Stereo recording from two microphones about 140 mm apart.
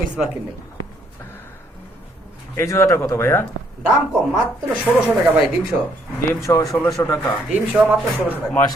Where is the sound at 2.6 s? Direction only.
20° left (ahead or behind).